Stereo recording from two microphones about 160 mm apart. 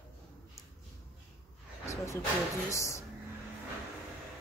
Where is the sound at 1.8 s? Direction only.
20° left (ahead or behind).